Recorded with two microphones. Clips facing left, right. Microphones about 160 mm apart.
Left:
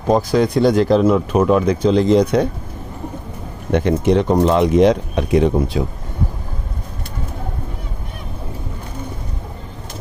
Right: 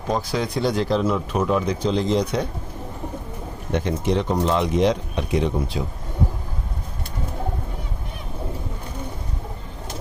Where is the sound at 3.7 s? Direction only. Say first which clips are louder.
Left 7 dB; 65° left (ahead or behind).